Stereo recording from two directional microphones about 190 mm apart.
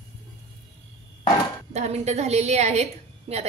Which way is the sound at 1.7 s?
35° right (ahead or behind).